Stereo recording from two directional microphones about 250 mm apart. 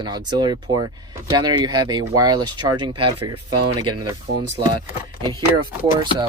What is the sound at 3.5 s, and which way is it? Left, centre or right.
Speech, right.